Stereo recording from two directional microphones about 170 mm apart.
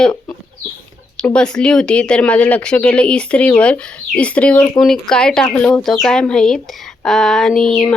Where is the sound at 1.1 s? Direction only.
5° left (ahead or behind).